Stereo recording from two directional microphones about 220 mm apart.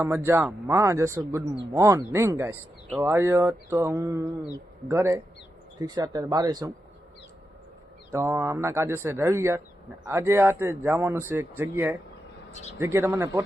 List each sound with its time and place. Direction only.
0.0 s speech: 10° right (ahead or behind)
8.1 s speech: 10° right (ahead or behind)